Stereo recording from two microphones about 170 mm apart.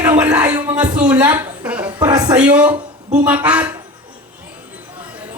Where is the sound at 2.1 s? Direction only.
25° right (ahead or behind).